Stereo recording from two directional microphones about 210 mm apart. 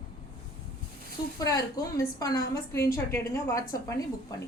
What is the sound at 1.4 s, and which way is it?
A woman's voice, 15° left (ahead or behind).